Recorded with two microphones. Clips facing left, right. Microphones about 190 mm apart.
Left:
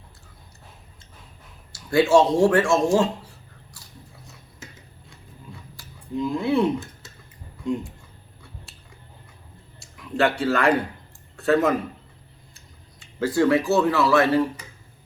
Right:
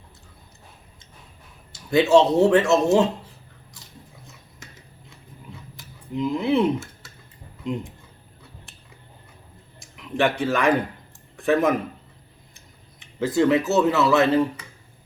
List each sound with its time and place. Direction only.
1.7 s speech: 20° right (ahead or behind)
5.7 s a sound: 20° right (ahead or behind)
7.6 s speech: 20° right (ahead or behind)
9.8 s speech: 20° right (ahead or behind)
13.0 s speech: 20° right (ahead or behind)